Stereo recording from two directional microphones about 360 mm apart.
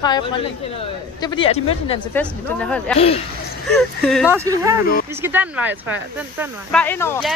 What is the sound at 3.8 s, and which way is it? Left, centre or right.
Speech, centre.